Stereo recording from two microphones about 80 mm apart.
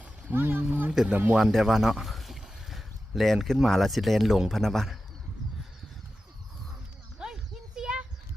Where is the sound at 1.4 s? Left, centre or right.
Centre.